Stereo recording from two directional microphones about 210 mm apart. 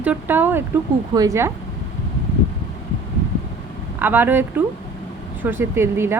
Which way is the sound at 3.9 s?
10° right (ahead or behind).